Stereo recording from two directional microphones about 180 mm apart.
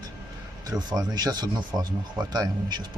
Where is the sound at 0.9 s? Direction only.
20° right (ahead or behind).